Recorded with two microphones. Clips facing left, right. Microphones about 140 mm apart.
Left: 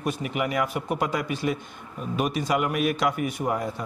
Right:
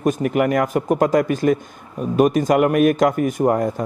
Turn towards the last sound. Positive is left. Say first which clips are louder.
# right 9 dB
turn(degrees=-45)  # may be behind; listen again after turning